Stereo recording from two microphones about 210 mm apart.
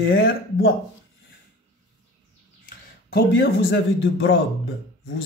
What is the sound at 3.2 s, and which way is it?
Speech, 55° left (ahead or behind).